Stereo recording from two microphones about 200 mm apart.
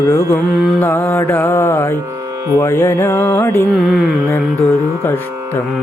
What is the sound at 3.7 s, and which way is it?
Music, centre (ahead or behind).